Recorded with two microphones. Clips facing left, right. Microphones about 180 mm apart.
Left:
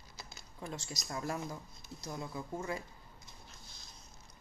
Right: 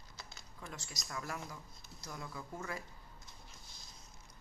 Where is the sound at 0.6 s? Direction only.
25° left (ahead or behind).